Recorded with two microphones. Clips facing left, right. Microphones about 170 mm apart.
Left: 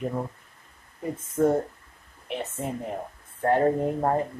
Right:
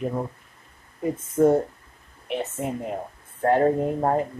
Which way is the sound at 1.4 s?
10° right (ahead or behind).